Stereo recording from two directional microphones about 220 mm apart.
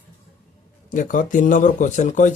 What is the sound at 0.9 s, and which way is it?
Speech, 35° left (ahead or behind).